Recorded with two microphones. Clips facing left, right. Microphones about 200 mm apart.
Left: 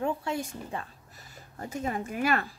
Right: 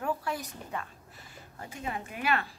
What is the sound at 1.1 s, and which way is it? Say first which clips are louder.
Speech: left 4 dB; 40° left (ahead or behind).